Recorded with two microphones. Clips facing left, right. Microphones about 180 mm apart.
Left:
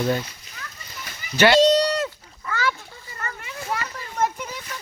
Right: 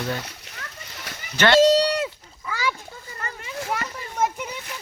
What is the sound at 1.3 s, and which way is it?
Speech, 10° left (ahead or behind).